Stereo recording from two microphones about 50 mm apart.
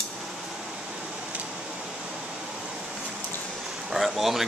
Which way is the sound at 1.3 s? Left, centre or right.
Right.